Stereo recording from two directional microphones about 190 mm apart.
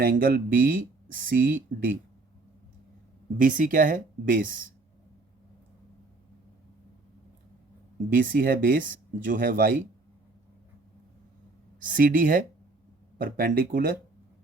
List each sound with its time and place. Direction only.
0.0 s speech: 50° right (ahead or behind)
3.3 s speech: 45° right (ahead or behind)
8.3 s speech: 45° right (ahead or behind)
11.8 s speech: 45° right (ahead or behind)